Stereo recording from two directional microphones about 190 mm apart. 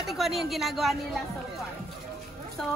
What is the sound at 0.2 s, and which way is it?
Speech, centre (ahead or behind).